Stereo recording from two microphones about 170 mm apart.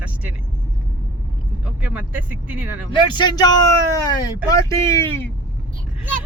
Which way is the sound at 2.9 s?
25° left (ahead or behind).